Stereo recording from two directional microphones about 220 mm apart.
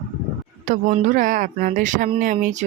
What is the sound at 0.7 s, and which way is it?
Speech, 35° right (ahead or behind).